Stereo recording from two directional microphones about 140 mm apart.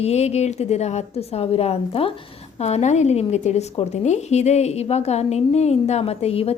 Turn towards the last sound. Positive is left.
turn(degrees=45)  # may be behind; listen again after turning